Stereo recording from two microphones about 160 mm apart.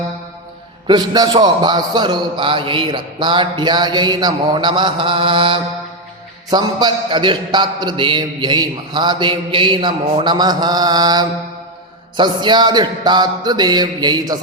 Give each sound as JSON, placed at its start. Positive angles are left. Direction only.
{"t": 0.9, "sound": "a man's voice", "side_deg": -25}